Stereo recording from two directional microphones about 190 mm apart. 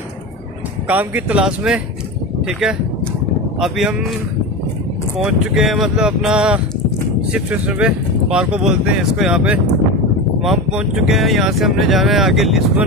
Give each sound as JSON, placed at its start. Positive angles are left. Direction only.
{"t": 0.8, "sound": "speech", "side_deg": -10}
{"t": 5.2, "sound": "speech", "side_deg": 0}